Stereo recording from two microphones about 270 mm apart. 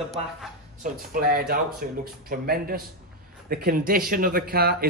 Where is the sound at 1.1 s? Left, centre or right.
Right.